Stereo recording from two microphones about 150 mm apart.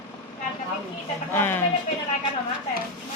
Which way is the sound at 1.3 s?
15° left (ahead or behind).